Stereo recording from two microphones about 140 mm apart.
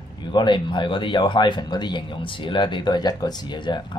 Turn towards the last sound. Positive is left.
turn(degrees=35)  # may be behind; listen again after turning